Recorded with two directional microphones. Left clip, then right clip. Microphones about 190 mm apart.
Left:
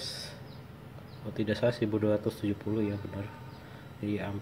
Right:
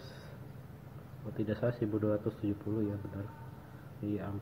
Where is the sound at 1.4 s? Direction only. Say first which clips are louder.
Left 5 dB; 5° left (ahead or behind).